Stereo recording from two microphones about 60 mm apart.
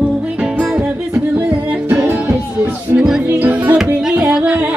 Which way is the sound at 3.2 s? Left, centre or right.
Right.